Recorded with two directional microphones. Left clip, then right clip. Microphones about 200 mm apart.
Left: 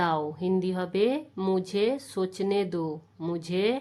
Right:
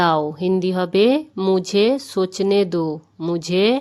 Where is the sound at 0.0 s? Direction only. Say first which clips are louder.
Right 9 dB; 35° right (ahead or behind).